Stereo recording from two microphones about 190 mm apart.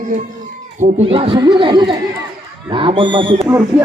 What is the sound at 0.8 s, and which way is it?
Speech, 30° right (ahead or behind).